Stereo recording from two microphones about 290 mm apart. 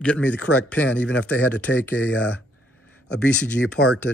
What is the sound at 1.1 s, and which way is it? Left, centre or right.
Speech, left.